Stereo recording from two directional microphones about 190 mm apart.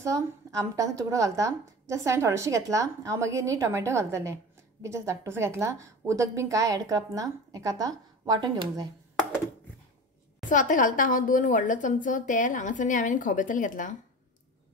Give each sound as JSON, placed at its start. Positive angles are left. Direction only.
{"t": 0.0, "sound": "a woman's voice", "side_deg": -15}
{"t": 10.5, "sound": "a woman's voice", "side_deg": 45}